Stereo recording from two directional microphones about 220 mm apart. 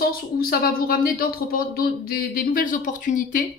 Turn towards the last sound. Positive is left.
turn(degrees=35)  # may be behind; listen again after turning